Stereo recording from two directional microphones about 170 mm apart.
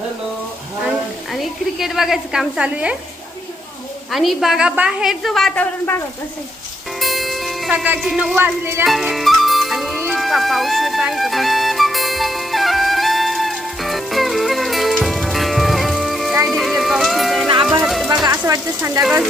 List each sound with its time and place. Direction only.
0.8 s a woman's voice: centre (ahead or behind)
4.1 s a woman's voice: centre (ahead or behind)
7.0 s speech: centre (ahead or behind)
8.8 s music: centre (ahead or behind)
18.4 s speech: 15° right (ahead or behind)